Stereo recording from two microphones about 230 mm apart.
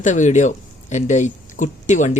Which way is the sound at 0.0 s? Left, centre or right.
Left.